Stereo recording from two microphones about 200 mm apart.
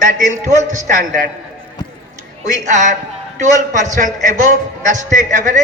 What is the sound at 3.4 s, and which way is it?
A man's voice, 35° right (ahead or behind).